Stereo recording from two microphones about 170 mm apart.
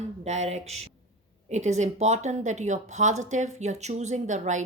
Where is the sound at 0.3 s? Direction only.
40° right (ahead or behind).